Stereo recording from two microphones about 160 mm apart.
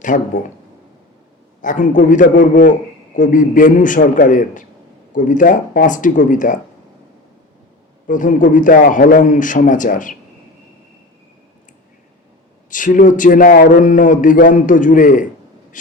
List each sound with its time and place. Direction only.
0.1 s speech: 55° left (ahead or behind)
1.6 s speech: 55° left (ahead or behind)
8.0 s speech: 55° left (ahead or behind)
12.7 s speech: 55° left (ahead or behind)
15.7 s vehicle: 55° left (ahead or behind)